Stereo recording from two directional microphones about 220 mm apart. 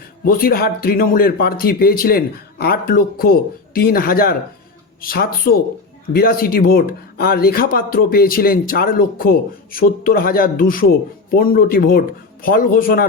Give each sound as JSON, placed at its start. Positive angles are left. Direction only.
{"t": 0.3, "sound": "speech", "side_deg": 40}